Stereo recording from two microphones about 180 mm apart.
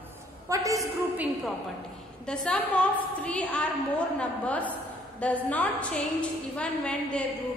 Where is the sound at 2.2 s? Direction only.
5° left (ahead or behind).